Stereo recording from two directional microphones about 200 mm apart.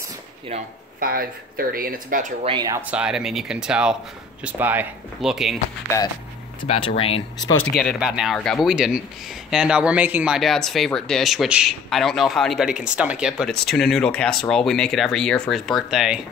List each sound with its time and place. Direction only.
0.9 s speech: 50° right (ahead or behind)
2.4 s speech: 20° right (ahead or behind)
2.9 s speech: 5° right (ahead or behind)
5.9 s speech: 15° left (ahead or behind)
6.7 s speech: 30° left (ahead or behind)
7.7 s speech: centre (ahead or behind)